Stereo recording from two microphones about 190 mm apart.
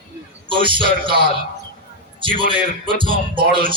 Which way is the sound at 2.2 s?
25° right (ahead or behind).